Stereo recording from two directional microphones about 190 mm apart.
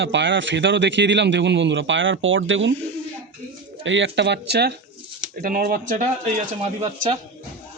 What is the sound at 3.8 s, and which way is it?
Speech, 75° right (ahead or behind).